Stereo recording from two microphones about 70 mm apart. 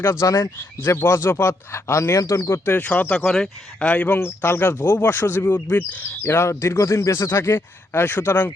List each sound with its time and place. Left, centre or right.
0.0 s speech: left
0.8 s a man's voice: left
2.7 s speech: left
3.1 s a man's voice: centre; by 8.5 s left